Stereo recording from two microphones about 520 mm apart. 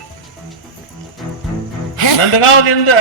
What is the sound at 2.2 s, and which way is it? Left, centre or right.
Speech, left.